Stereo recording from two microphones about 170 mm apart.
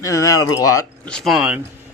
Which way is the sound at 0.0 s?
20° left (ahead or behind).